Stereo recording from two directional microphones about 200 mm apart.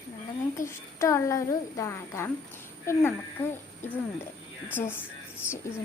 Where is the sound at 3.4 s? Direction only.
10° left (ahead or behind).